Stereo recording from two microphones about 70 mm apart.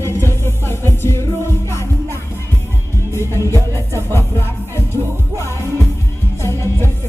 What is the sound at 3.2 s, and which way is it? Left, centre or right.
Music, left.